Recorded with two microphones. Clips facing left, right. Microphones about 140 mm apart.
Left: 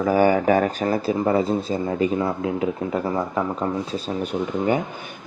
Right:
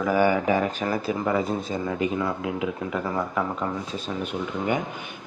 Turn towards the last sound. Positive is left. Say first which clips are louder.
# left 4 dB
turn(degrees=35)  # may be behind; listen again after turning